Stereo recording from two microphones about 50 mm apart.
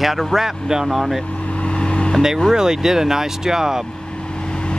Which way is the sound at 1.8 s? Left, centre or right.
Centre.